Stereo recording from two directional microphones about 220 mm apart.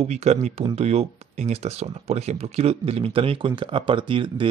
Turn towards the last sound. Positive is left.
turn(degrees=-20)  # may be behind; listen again after turning